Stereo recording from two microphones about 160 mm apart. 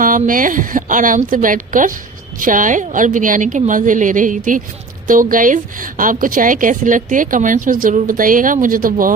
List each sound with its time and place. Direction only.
0.0 s a woman's voice: 60° right (ahead or behind)